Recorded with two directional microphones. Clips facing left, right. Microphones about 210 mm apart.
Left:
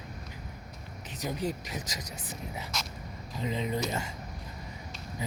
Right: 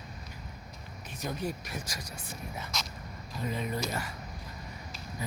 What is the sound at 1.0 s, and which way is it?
Speech, 15° left (ahead or behind).